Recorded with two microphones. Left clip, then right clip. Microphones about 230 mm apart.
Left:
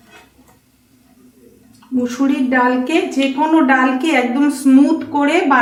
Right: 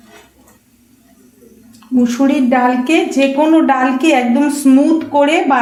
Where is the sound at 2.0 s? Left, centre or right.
Right.